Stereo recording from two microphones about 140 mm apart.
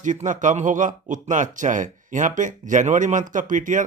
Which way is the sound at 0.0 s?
65° right (ahead or behind).